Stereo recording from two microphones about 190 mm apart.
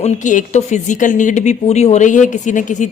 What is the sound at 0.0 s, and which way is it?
A woman's voice, 40° left (ahead or behind).